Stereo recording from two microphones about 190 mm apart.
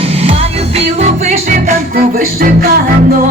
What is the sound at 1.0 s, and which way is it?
Music, 40° right (ahead or behind).